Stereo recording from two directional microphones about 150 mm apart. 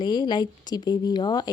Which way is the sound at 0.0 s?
30° left (ahead or behind).